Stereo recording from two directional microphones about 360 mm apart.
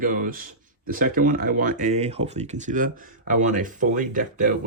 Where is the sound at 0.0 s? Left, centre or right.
Right.